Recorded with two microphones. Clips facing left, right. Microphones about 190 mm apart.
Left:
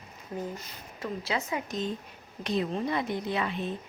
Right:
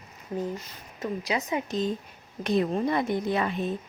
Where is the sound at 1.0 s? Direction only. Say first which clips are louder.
Right 3 dB; 15° right (ahead or behind).